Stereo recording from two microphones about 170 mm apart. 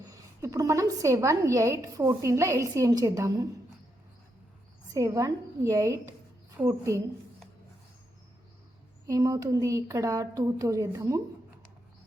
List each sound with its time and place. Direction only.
0.0 s a woman's voice: 20° right (ahead or behind)
4.9 s a woman's voice: 20° right (ahead or behind)
9.0 s a woman's voice: 20° right (ahead or behind)